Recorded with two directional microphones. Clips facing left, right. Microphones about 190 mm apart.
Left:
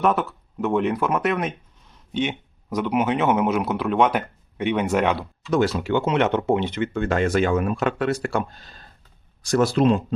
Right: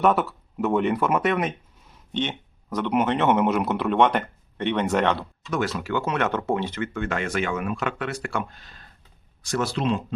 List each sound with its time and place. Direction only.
0.0 s speech: centre (ahead or behind)
5.5 s speech: 30° left (ahead or behind); by 10.0 s 45° left (ahead or behind)